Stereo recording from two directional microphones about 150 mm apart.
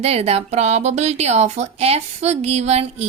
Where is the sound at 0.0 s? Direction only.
45° right (ahead or behind).